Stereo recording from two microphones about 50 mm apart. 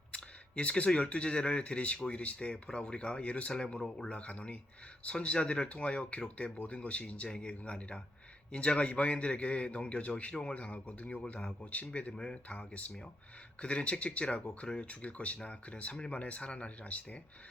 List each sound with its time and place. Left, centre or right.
0.1 s camera: left
0.9 s speech: left
4.1 s speech: left
12.5 s speech: left